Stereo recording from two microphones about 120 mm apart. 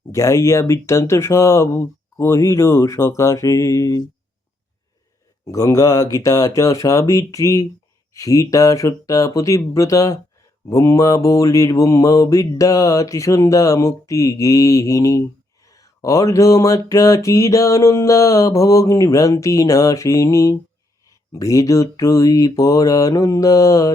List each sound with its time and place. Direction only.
0.1 s mantra: 25° left (ahead or behind)
5.5 s mantra: 30° left (ahead or behind)